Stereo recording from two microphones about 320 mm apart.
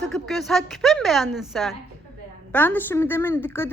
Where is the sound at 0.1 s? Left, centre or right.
Centre.